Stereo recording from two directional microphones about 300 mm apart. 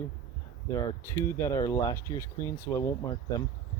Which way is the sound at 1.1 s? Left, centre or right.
Centre.